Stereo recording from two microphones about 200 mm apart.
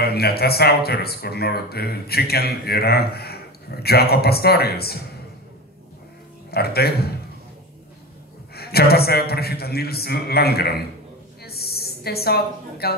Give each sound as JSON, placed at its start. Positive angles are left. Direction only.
{"t": 0.0, "sound": "speech", "side_deg": 50}
{"t": 6.5, "sound": "speech", "side_deg": 50}
{"t": 8.5, "sound": "speech", "side_deg": 50}
{"t": 11.4, "sound": "a sound", "side_deg": 50}